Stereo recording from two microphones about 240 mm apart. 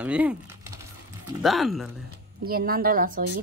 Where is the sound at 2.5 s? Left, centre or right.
Right.